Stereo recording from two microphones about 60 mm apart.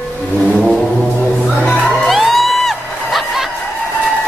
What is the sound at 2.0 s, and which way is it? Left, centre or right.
Music, centre.